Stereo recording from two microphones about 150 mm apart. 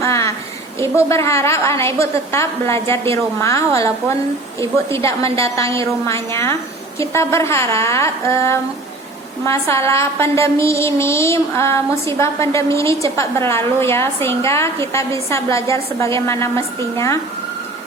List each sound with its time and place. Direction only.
0.0 s a sound: 20° left (ahead or behind)
0.8 s a woman's voice: 20° left (ahead or behind)
4.6 s a woman's voice: 20° left (ahead or behind)